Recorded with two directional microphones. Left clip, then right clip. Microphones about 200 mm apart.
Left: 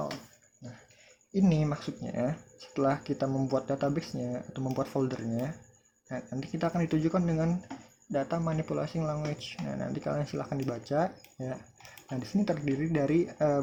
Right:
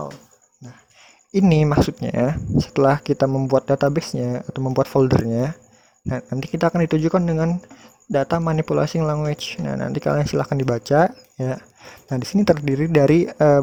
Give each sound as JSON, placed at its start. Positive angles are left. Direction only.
{"t": 1.3, "sound": "speech", "side_deg": -50}
{"t": 8.1, "sound": "speech", "side_deg": -50}